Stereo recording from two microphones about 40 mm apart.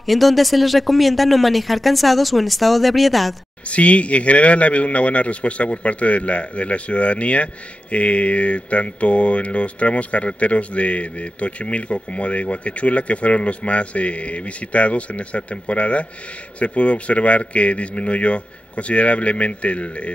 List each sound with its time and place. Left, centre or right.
0.0 s speech: centre
3.6 s speech: left